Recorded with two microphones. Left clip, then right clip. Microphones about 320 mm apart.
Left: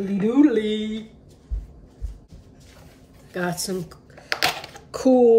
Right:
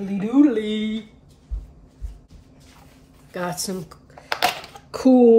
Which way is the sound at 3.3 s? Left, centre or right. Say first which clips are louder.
Left 1 dB; centre.